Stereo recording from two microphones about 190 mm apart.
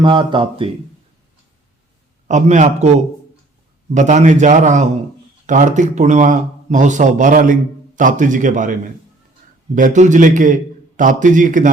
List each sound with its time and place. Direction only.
0.0 s speech: 25° right (ahead or behind)
2.2 s speech: 40° right (ahead or behind)
3.9 s speech: 40° right (ahead or behind)
9.7 s a man's voice: 40° right (ahead or behind)